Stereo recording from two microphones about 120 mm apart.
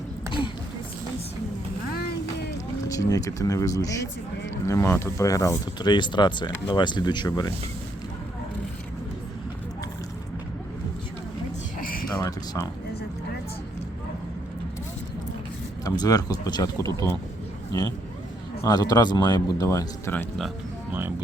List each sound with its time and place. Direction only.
2.9 s speech: 30° left (ahead or behind)
15.8 s speech: 30° left (ahead or behind)